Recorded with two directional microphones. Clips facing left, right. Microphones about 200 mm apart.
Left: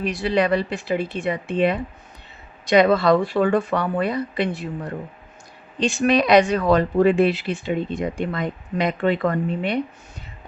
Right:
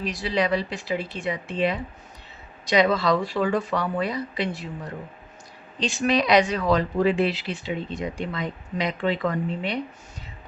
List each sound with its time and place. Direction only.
0.0 s speech: 60° left (ahead or behind)